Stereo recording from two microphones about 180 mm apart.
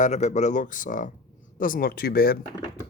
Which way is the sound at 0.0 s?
40° left (ahead or behind).